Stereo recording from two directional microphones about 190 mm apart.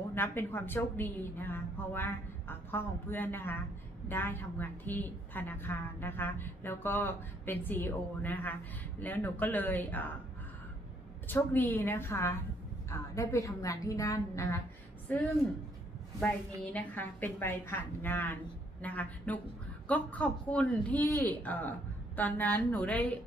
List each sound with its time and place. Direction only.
0.1 s a woman's voice: 10° left (ahead or behind)
11.2 s a woman's voice: 10° left (ahead or behind)
16.3 s a woman's voice: 10° left (ahead or behind)